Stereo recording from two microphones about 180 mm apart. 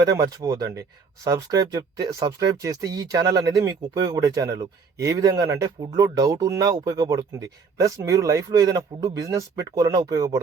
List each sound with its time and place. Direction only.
0.0 s speech: 25° right (ahead or behind)